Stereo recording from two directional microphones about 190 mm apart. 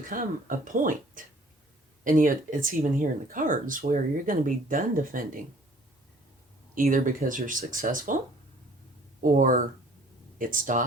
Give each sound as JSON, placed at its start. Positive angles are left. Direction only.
{"t": 0.1, "sound": "speech", "side_deg": -45}
{"t": 6.7, "sound": "speech", "side_deg": -45}
{"t": 9.2, "sound": "speech", "side_deg": -45}